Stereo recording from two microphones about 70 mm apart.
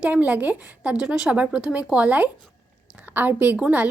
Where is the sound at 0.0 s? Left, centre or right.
Right.